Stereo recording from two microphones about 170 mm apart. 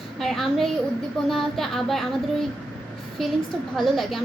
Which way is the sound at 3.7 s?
Centre (ahead or behind).